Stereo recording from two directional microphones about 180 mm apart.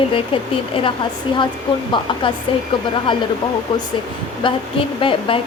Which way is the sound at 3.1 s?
25° left (ahead or behind).